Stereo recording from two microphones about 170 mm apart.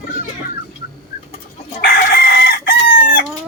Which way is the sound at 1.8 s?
65° left (ahead or behind).